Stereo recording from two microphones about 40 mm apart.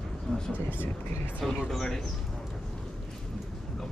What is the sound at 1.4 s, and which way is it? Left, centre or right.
Speech, centre.